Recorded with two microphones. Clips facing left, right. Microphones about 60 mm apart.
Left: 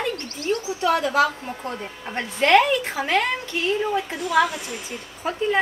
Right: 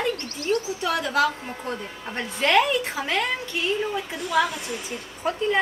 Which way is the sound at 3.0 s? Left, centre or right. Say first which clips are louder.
Left 4 dB; centre.